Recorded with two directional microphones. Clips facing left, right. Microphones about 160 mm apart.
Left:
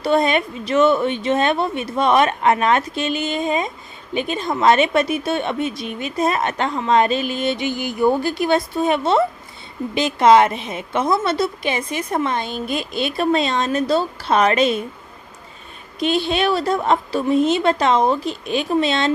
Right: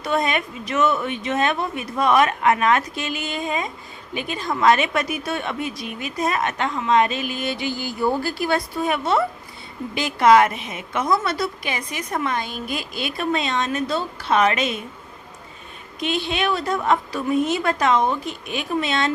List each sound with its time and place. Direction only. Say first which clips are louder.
0.0 s a woman's voice: left 5 dB; 30° left (ahead or behind)
16.0 s a woman's voice: left 5 dB; 35° left (ahead or behind)